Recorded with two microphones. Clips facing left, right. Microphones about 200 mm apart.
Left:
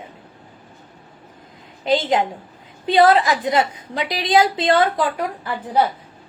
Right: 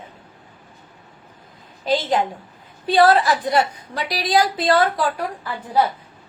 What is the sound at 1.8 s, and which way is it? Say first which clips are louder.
A woman's voice: left 2 dB; 20° left (ahead or behind).